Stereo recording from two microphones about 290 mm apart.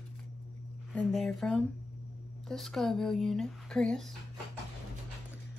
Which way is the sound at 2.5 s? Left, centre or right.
Centre.